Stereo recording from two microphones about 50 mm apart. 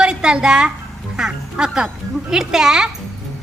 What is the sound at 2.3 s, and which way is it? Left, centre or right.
Speech, centre.